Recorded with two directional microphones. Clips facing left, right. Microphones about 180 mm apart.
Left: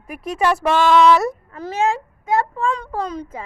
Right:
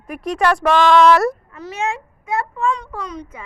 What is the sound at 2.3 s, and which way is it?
Speech, 30° left (ahead or behind).